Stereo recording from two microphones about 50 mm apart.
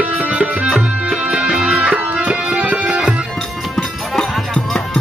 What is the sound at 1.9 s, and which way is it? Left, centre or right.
Tabla, right.